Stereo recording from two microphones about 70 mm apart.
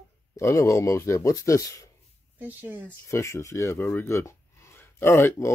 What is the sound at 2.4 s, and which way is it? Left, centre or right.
Speech, right.